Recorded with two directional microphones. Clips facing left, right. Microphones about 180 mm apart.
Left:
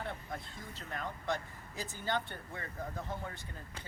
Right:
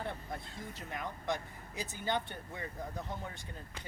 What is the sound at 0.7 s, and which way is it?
Speech, 15° right (ahead or behind).